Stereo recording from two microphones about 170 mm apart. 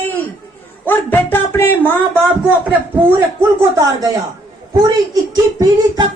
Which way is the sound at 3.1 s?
20° right (ahead or behind).